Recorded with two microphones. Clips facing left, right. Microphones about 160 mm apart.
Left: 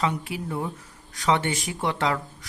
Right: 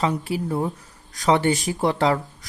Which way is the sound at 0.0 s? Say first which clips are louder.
Right 4 dB; 35° right (ahead or behind).